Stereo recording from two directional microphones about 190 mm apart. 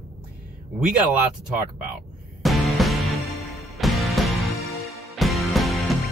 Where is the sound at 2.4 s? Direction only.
Centre (ahead or behind).